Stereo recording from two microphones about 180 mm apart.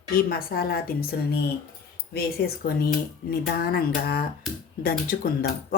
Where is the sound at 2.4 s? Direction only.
60° left (ahead or behind).